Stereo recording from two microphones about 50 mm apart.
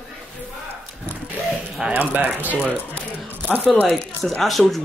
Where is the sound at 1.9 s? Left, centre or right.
Right.